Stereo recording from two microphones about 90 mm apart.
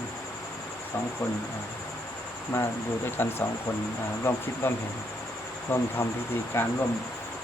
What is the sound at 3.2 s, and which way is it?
Speech, 30° left (ahead or behind).